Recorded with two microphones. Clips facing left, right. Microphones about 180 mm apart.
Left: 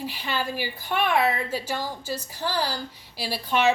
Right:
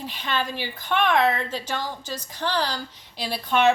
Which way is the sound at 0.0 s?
10° left (ahead or behind).